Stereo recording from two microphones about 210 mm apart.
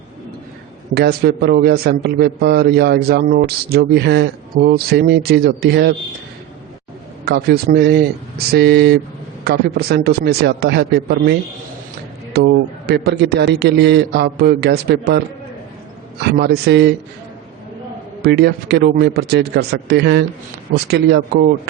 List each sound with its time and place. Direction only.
0.9 s a man's voice: 50° right (ahead or behind)
7.3 s a man's voice: 50° right (ahead or behind)
16.2 s a man's voice: 50° right (ahead or behind)
18.2 s a man's voice: 50° right (ahead or behind)